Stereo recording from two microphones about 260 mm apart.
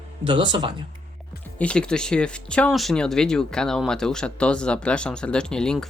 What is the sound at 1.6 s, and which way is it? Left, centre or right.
Speech, centre.